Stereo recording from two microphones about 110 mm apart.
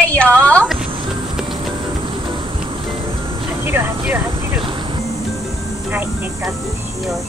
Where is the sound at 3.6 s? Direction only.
20° right (ahead or behind).